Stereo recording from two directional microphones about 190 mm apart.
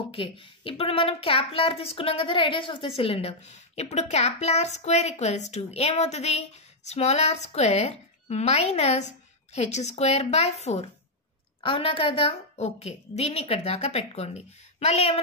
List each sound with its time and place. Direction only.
0.1 s a woman's voice: 30° left (ahead or behind)